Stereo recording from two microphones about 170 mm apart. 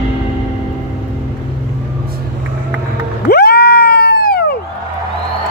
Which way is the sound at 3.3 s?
65° left (ahead or behind).